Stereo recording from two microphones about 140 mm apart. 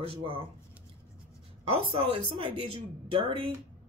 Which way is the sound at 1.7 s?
40° right (ahead or behind).